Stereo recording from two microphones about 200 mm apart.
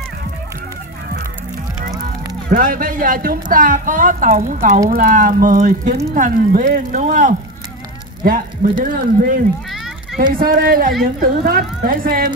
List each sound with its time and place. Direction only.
2.5 s a woman's voice: 45° right (ahead or behind)